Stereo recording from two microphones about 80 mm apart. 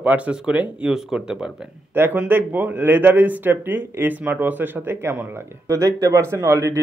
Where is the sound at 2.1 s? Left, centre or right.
Right.